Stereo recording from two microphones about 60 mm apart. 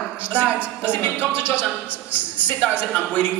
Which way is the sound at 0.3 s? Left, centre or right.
Right.